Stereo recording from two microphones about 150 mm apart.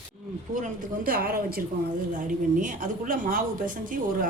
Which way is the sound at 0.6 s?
65° right (ahead or behind).